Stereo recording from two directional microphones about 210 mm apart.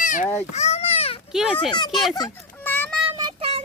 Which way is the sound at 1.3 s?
Centre (ahead or behind).